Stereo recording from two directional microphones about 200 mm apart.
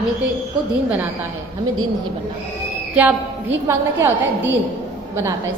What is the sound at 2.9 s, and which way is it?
A woman's voice, 10° right (ahead or behind).